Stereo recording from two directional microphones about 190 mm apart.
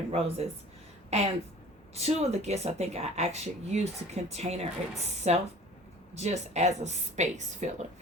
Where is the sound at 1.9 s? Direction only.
35° right (ahead or behind).